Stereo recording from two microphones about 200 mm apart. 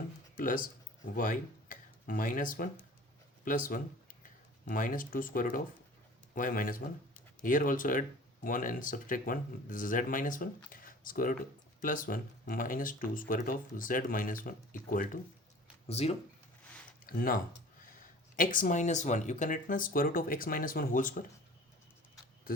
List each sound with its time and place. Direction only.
0.3 s speech: 45° left (ahead or behind)
10.7 s a sound: 45° left (ahead or behind)
11.8 s speech: 45° left (ahead or behind)
15.9 s speech: 30° left (ahead or behind)
17.1 s speech: 45° left (ahead or behind)